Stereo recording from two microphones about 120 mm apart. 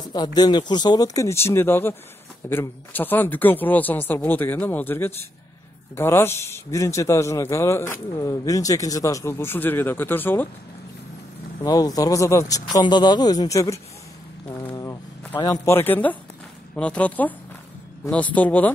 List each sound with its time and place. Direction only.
0.0 s a man's voice: 35° left (ahead or behind); by 10.5 s 15° left (ahead or behind)
11.6 s speech: 30° left (ahead or behind)
15.4 s speech: 25° left (ahead or behind)